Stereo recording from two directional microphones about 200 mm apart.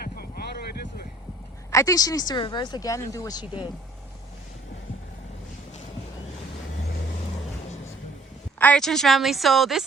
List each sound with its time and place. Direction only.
0.0 s boat: 50° left (ahead or behind)
1.7 s speech: 15° left (ahead or behind)
8.5 s a woman's voice: 5° left (ahead or behind)